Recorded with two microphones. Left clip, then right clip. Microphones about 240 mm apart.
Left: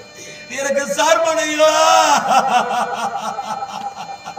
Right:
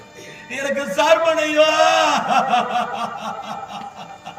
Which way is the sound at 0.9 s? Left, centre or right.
Centre.